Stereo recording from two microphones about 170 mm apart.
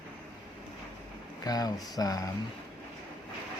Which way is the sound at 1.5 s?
20° left (ahead or behind).